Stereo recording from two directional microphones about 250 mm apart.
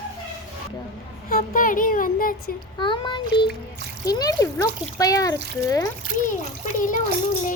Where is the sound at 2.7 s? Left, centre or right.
Centre.